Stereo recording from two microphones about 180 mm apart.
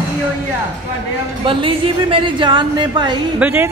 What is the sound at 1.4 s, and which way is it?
A woman's voice, 30° right (ahead or behind).